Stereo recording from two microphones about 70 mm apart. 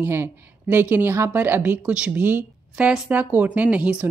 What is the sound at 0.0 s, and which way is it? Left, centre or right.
A woman's voice, right.